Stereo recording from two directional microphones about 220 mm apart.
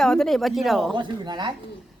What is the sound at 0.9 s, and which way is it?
Speech, 20° right (ahead or behind).